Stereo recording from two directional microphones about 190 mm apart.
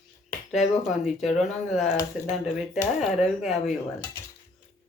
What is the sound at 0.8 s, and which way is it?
Speech, centre (ahead or behind).